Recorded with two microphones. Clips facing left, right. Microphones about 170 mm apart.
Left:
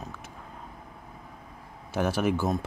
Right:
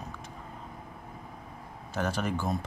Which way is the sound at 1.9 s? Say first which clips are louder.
Left 5 dB; 10° left (ahead or behind).